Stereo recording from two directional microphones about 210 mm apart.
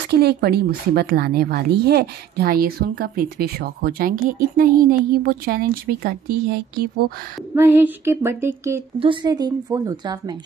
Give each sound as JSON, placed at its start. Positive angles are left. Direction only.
{"t": 0.1, "sound": "a woman's voice", "side_deg": -50}
{"t": 7.5, "sound": "a sound", "side_deg": -10}
{"t": 9.0, "sound": "a woman's voice", "side_deg": -20}